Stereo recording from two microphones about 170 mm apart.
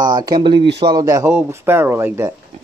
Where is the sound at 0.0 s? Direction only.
25° right (ahead or behind).